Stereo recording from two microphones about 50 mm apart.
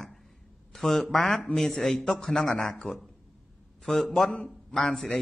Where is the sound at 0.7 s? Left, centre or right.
Centre.